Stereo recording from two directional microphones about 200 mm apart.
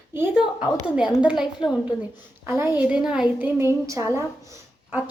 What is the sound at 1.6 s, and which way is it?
Speech, 25° left (ahead or behind).